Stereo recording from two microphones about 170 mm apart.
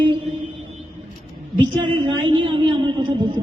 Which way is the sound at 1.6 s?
30° right (ahead or behind).